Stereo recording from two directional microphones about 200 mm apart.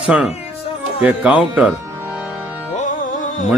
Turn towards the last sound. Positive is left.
turn(degrees=35)  # may be behind; listen again after turning